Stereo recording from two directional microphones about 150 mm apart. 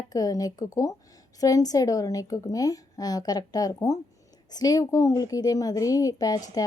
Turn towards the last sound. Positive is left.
turn(degrees=25)  # may be behind; listen again after turning